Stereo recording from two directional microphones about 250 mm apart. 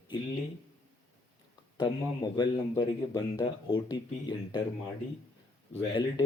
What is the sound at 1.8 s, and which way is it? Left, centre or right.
A man's voice, centre.